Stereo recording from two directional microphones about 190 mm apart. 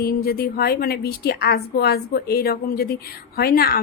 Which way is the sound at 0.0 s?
50° left (ahead or behind).